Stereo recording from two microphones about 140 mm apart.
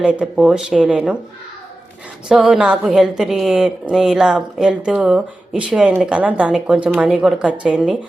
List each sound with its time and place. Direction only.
0.0 s a woman's voice: 5° right (ahead or behind)
2.3 s a woman's voice: 5° right (ahead or behind)